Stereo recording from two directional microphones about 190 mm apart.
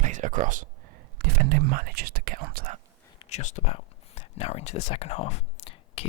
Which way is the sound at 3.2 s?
35° left (ahead or behind).